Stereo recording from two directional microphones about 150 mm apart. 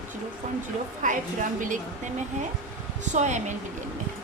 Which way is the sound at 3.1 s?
50° right (ahead or behind).